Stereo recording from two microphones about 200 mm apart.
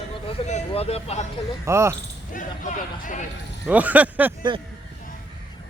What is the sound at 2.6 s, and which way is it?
Speech, 40° left (ahead or behind).